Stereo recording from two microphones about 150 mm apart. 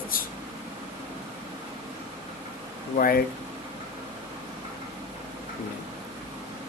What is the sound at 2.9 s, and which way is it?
Speech, 75° left (ahead or behind).